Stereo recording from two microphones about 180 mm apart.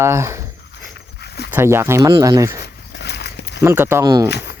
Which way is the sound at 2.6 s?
70° left (ahead or behind).